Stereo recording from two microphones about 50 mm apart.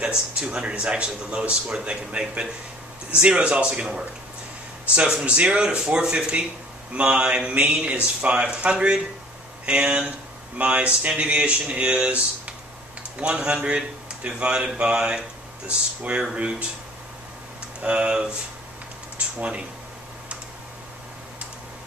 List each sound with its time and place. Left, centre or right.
0.0 s speech: centre
17.8 s speech: centre